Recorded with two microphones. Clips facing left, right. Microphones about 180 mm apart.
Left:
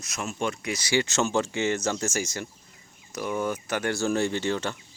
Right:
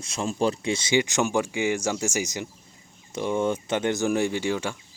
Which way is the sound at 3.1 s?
25° right (ahead or behind).